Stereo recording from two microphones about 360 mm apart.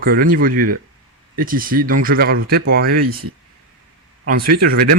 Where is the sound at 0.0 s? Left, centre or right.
Right.